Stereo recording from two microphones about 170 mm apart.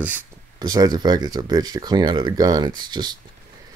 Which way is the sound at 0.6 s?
25° right (ahead or behind).